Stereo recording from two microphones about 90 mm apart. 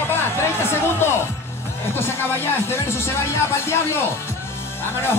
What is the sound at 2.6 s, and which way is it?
Speech, 30° left (ahead or behind).